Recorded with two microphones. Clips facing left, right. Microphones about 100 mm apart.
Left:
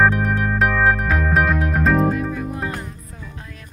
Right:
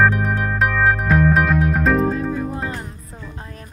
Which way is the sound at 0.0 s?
Centre (ahead or behind).